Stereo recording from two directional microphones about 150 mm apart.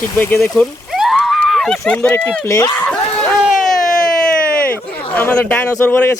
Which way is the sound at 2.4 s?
20° left (ahead or behind).